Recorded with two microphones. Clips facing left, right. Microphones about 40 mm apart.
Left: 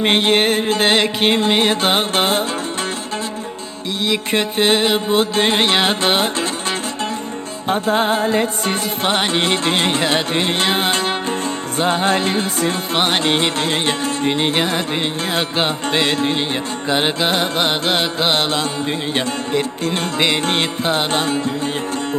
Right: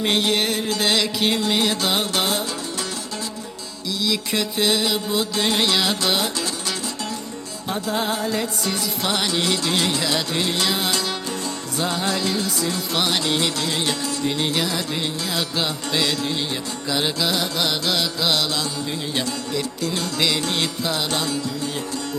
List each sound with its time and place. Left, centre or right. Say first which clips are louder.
0.0 s music: left 6 dB; left
4.0 s music: left 5 dB; left
7.7 s music: left 7 dB; left